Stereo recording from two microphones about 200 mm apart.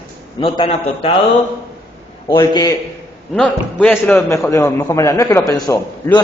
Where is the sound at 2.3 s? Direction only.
20° left (ahead or behind).